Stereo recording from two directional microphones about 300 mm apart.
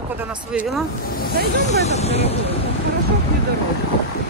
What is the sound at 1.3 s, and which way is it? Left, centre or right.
Speech, right.